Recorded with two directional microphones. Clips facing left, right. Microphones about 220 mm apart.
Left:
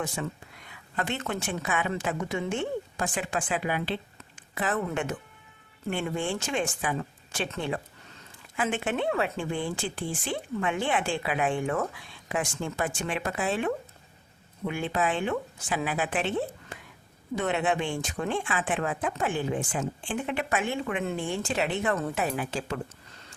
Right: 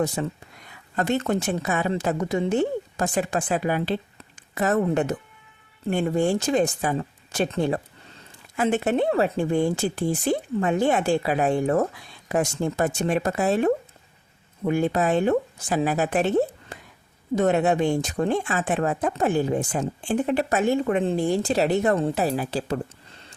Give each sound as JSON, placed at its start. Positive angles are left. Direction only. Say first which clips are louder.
{"t": 0.2, "sound": "speech", "louder": "right 5 dB", "side_deg": -35}